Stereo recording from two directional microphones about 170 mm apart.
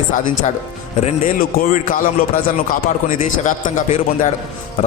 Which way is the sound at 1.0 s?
55° left (ahead or behind).